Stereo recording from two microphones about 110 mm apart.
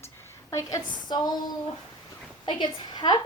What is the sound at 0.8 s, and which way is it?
Speech, 40° left (ahead or behind).